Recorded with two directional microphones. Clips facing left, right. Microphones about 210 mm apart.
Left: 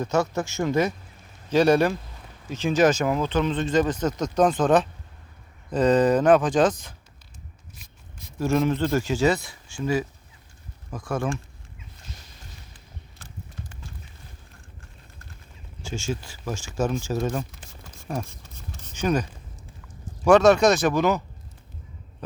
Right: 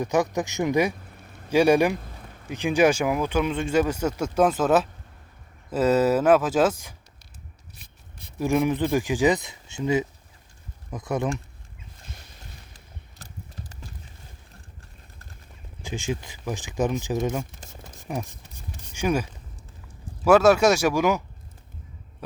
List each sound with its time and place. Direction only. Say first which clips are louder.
0.0 s speech: right 1 dB; 15° right (ahead or behind)
8.4 s speech: even; 15° right (ahead or behind)
12.7 s a sound: left 1 dB; 40° right (ahead or behind)
15.8 s speech: even; 15° right (ahead or behind)
17.7 s a sound: even; 15° right (ahead or behind)
20.2 s speech: left 1 dB; 5° right (ahead or behind)